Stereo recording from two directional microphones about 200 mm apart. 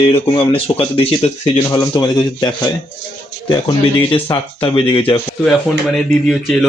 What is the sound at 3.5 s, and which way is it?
Speech, 20° left (ahead or behind).